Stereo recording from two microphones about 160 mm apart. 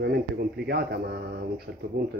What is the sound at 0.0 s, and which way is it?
Speech, 90° right.